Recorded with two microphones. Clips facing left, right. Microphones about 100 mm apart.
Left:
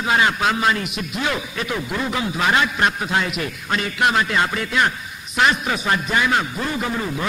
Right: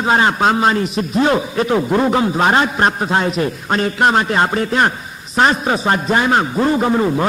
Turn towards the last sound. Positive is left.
turn(degrees=-40)  # may be behind; listen again after turning